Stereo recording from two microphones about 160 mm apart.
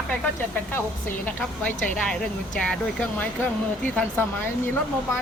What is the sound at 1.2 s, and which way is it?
Speech, 10° left (ahead or behind).